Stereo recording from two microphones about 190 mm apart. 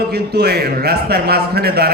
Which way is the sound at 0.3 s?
55° right (ahead or behind).